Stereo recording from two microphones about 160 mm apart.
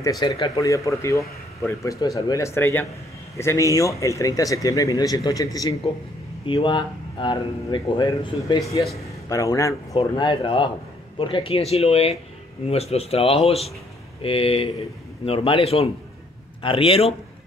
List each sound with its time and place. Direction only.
0.2 s a man's voice: 25° left (ahead or behind)
9.9 s a man's voice: 30° left (ahead or behind)